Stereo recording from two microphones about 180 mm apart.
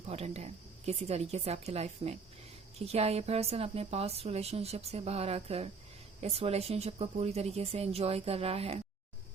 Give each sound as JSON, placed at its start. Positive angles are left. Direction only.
{"t": 0.1, "sound": "speech", "side_deg": -35}